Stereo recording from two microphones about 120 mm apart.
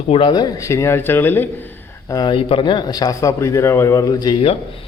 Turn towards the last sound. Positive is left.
turn(degrees=30)  # may be behind; listen again after turning